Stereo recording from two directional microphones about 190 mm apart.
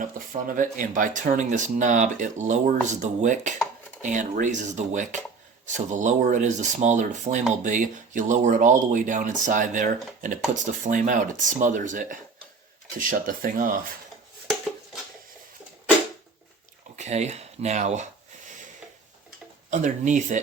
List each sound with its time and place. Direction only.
0.0 s speech: 45° right (ahead or behind)
17.0 s speech: 35° right (ahead or behind)
19.7 s speech: 40° right (ahead or behind)